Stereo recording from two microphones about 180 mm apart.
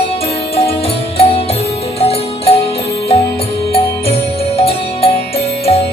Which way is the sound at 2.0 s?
35° left (ahead or behind).